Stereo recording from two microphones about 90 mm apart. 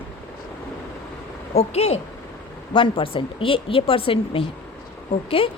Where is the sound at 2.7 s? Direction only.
70° left (ahead or behind).